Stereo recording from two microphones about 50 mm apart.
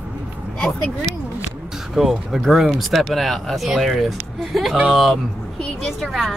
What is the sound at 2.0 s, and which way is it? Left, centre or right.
Speech, centre.